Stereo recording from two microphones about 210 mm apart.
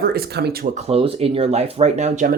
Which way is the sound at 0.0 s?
45° right (ahead or behind).